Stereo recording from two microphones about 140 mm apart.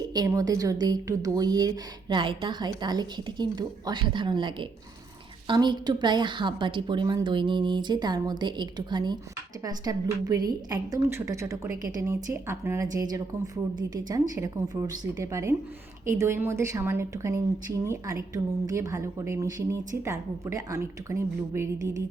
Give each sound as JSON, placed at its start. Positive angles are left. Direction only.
{"t": 0.1, "sound": "a woman's voice", "side_deg": -25}